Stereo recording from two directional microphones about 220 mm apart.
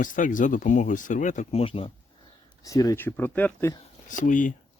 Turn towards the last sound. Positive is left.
turn(degrees=35)  # may be behind; listen again after turning